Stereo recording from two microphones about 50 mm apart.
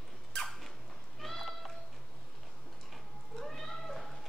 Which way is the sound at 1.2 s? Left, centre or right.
Centre.